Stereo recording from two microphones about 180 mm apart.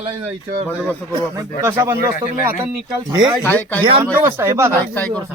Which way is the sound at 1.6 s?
15° right (ahead or behind).